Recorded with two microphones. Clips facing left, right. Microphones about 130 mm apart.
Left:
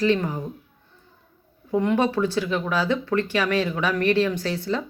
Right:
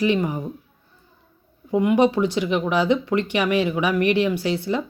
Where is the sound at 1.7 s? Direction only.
10° right (ahead or behind).